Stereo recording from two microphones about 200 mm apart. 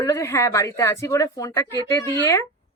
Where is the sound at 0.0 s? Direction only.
15° left (ahead or behind).